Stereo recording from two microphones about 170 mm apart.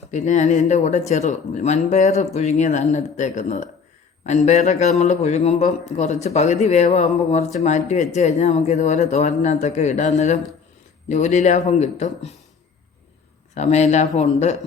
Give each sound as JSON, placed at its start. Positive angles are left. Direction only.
{"t": 0.1, "sound": "speech", "side_deg": 45}
{"t": 13.5, "sound": "speech", "side_deg": 45}